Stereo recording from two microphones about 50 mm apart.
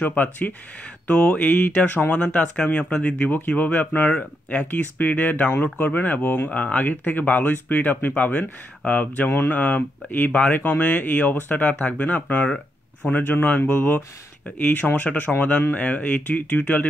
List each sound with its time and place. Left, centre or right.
0.0 s speech: left
2.1 s speech: centre
3.2 s speech: left
6.5 s speech: left
15.0 s speech: left